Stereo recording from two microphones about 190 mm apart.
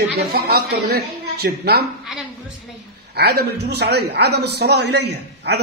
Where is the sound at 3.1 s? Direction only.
60° right (ahead or behind).